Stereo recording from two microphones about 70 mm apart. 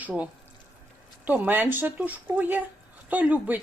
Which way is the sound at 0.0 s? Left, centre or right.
Right.